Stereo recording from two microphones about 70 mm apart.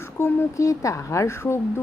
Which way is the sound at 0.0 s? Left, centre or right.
Left.